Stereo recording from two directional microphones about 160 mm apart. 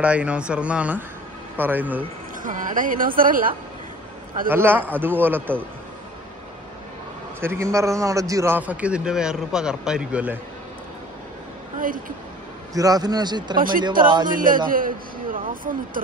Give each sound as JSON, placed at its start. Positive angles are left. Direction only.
{"t": 0.0, "sound": "a man's voice", "side_deg": -5}
{"t": 2.4, "sound": "a woman's voice", "side_deg": -55}
{"t": 4.5, "sound": "a man's voice", "side_deg": -15}
{"t": 7.3, "sound": "a man's voice", "side_deg": -15}
{"t": 12.7, "sound": "speech", "side_deg": -25}
{"t": 13.6, "sound": "a woman's voice", "side_deg": -60}